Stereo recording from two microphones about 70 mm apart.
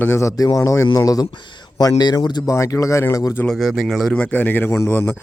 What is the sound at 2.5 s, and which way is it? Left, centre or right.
Speech, left.